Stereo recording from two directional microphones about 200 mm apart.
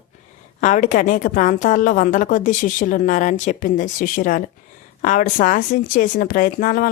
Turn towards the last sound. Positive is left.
turn(degrees=45)  # may be behind; listen again after turning